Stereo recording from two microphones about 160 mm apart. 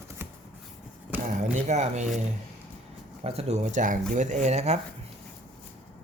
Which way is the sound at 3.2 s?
40° right (ahead or behind).